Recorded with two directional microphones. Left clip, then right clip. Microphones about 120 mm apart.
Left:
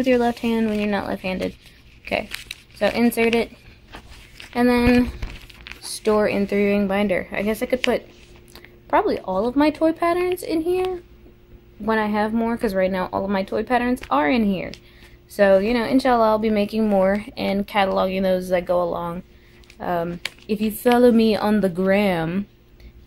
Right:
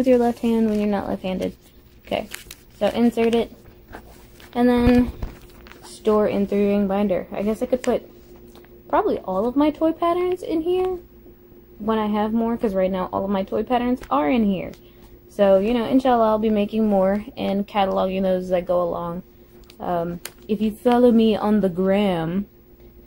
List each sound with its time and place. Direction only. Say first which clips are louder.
0.0 s speech: right 1 dB; 30° right (ahead or behind)
2.8 s a woman's voice: left 1 dB; centre (ahead or behind)
3.1 s speech: left 1 dB; 20° right (ahead or behind)
4.5 s a woman's voice: even; centre (ahead or behind)
8.5 s a sound: left 1 dB; centre (ahead or behind)
9.2 s a woman's voice: left 1 dB; centre (ahead or behind)
11.8 s a woman's voice: left 1 dB; 5° right (ahead or behind)